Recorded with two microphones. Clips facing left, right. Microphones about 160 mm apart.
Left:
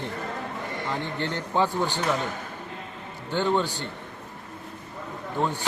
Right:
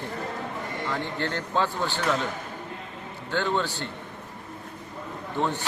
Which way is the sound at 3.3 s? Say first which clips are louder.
Left 2 dB; 15° left (ahead or behind).